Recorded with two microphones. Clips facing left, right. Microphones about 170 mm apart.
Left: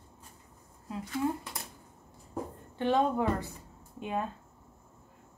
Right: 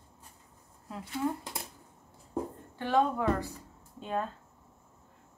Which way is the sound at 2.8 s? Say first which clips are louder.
Left 1 dB; 25° left (ahead or behind).